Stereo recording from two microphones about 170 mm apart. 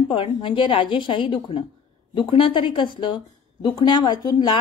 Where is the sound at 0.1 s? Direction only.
30° left (ahead or behind).